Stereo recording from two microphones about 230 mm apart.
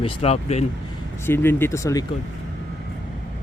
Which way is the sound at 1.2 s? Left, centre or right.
Centre.